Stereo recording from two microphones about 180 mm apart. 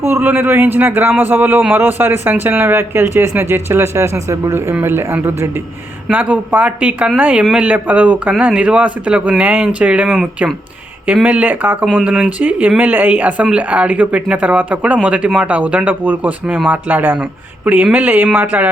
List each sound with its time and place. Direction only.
0.0 s a man's voice: 10° right (ahead or behind)